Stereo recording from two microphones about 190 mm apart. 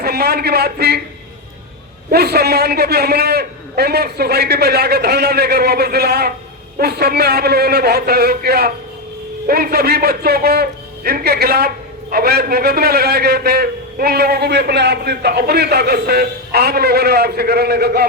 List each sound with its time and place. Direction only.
0.0 s a man's voice: 55° right (ahead or behind)
2.0 s a man's voice: 55° right (ahead or behind)